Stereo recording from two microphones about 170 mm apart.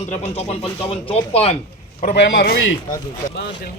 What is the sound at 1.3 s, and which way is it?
Speech, 35° left (ahead or behind).